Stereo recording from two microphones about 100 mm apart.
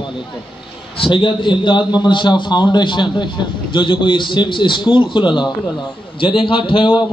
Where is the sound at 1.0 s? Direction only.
55° left (ahead or behind).